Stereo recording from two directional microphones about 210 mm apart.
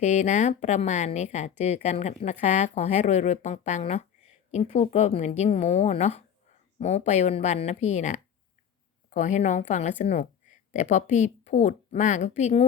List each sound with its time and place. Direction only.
0.0 s a woman's voice: 35° left (ahead or behind)